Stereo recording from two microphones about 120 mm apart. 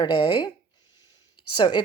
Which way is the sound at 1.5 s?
40° left (ahead or behind).